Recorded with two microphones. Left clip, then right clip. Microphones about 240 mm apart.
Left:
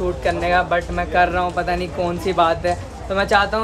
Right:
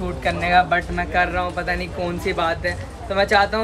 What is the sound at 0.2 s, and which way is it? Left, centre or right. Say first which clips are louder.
Speech: right 2 dB; centre.